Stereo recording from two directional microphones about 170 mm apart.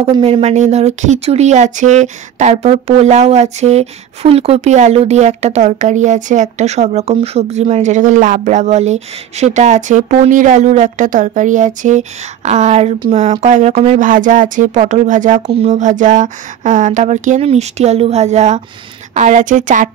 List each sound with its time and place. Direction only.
0.0 s speech: 35° right (ahead or behind)